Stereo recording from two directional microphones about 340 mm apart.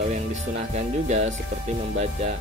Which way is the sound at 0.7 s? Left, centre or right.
Centre.